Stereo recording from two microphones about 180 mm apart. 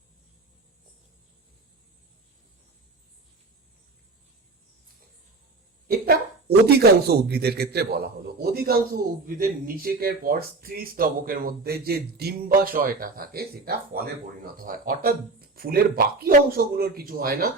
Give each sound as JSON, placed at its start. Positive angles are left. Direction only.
{"t": 5.9, "sound": "speech", "side_deg": -60}